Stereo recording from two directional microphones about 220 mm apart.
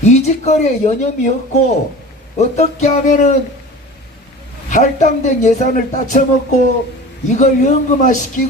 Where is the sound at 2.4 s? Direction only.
30° left (ahead or behind).